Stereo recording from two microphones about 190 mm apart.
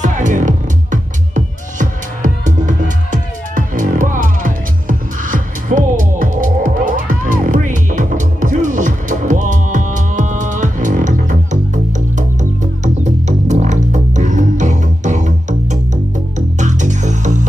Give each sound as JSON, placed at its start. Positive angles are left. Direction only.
{"t": 0.0, "sound": "music", "side_deg": -40}